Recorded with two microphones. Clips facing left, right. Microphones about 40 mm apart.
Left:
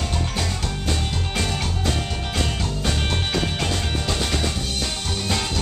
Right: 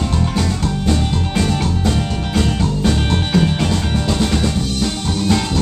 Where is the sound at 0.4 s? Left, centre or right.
Centre.